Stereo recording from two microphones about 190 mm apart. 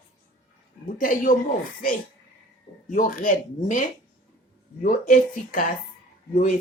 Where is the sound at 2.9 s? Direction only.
45° left (ahead or behind).